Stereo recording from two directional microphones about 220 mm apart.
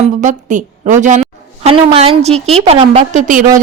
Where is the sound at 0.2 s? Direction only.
35° right (ahead or behind).